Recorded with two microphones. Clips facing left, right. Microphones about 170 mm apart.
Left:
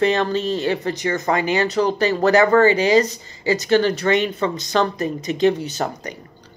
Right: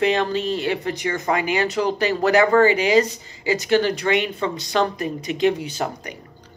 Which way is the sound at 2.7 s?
40° left (ahead or behind).